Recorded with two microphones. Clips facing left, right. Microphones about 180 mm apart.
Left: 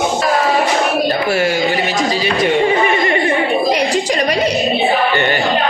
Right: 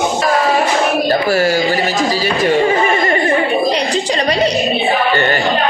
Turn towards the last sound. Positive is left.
turn(degrees=15)  # may be behind; listen again after turning